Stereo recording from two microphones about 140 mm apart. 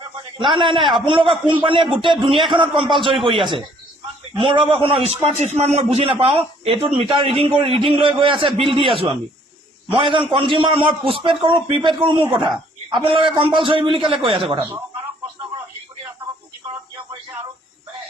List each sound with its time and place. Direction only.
0.3 s a man's voice: 35° right (ahead or behind)